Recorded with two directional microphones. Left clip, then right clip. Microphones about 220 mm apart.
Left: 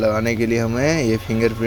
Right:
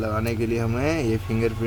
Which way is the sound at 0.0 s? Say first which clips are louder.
Left 7 dB; 25° left (ahead or behind).